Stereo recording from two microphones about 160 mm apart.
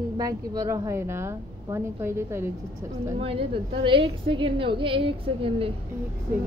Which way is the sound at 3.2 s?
35° right (ahead or behind).